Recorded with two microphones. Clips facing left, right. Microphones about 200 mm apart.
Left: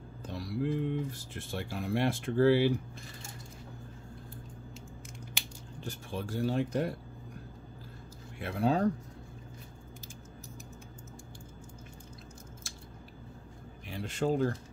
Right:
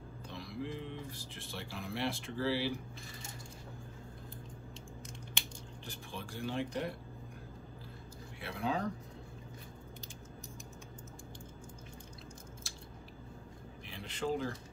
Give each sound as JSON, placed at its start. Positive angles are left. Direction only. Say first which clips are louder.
{"t": 0.3, "sound": "speech", "louder": "left 9 dB", "side_deg": 40}
{"t": 5.9, "sound": "speech", "louder": "left 8 dB", "side_deg": 45}
{"t": 8.4, "sound": "speech", "louder": "left 7 dB", "side_deg": 45}
{"t": 13.8, "sound": "speech", "louder": "left 6 dB", "side_deg": 45}